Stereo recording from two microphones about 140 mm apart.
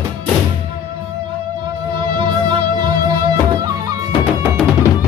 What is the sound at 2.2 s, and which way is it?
Music, 35° right (ahead or behind).